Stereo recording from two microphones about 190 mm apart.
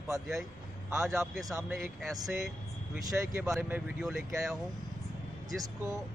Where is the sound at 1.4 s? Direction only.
15° right (ahead or behind).